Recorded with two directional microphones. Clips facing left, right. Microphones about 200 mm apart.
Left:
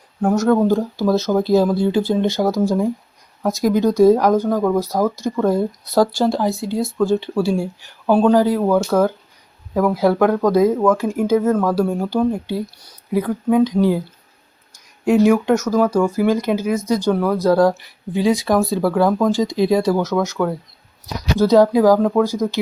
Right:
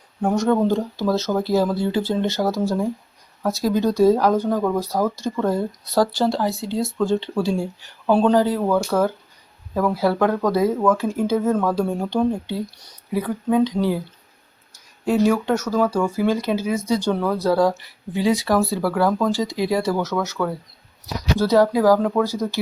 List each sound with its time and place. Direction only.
0.2 s speech: centre (ahead or behind)
15.0 s speech: 10° left (ahead or behind)